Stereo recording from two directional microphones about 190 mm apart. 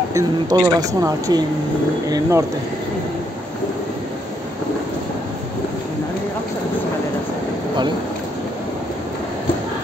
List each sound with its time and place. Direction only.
0.1 s speech: 20° right (ahead or behind)